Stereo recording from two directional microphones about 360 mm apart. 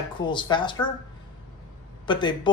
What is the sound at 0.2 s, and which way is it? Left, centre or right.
Speech, centre.